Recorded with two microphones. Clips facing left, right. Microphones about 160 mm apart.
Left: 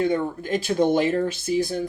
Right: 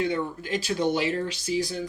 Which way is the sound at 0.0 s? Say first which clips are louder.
Left 4 dB; 45° left (ahead or behind).